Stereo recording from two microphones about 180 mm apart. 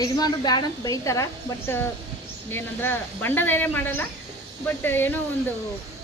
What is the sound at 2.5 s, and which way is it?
Speech, 10° left (ahead or behind).